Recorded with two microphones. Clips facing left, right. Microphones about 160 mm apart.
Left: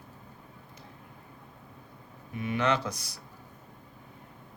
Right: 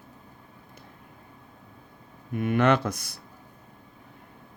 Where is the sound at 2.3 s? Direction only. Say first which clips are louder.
Right 6 dB; 55° right (ahead or behind).